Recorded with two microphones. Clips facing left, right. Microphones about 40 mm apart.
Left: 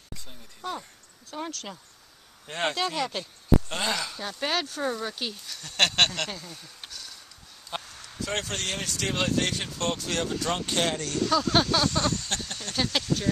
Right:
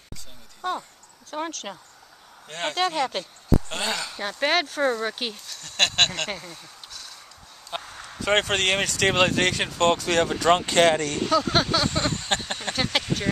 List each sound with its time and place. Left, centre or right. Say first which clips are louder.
1.3 s speech: right 4 dB; right
3.6 s speech: right 1 dB; centre
4.2 s a sound: right 6 dB; right
5.5 s speech: even; centre
6.9 s a sound: right 1 dB; centre
8.2 s speech: right 9 dB; right
11.1 s speech: right 2 dB; right
11.9 s a sound: right 2 dB; right
13.0 s speech: right 1 dB; right